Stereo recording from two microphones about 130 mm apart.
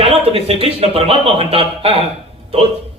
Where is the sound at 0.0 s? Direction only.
50° right (ahead or behind).